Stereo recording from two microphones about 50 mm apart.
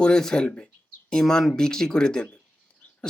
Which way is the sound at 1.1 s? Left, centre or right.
Centre.